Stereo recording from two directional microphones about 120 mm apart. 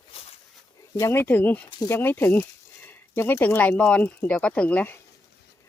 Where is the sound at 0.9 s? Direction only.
20° left (ahead or behind).